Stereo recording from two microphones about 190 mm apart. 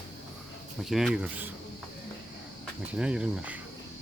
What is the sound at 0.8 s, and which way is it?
Speech, centre (ahead or behind).